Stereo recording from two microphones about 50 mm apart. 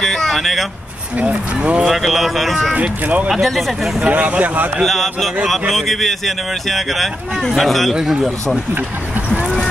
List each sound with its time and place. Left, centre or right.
0.0 s vehicle: centre
1.1 s speech: right
1.9 s speech: centre
2.7 s speech: right
3.3 s speech: centre
4.1 s speech: right
4.8 s speech: centre
7.9 s speech: centre
9.3 s a sound: centre